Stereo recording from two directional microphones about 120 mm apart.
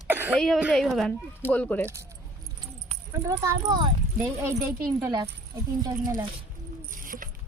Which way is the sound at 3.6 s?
40° right (ahead or behind).